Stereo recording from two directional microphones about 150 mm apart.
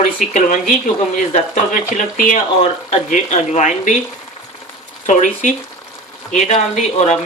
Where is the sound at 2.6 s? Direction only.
50° left (ahead or behind).